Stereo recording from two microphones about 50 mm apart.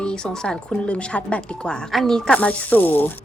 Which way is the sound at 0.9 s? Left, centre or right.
Left.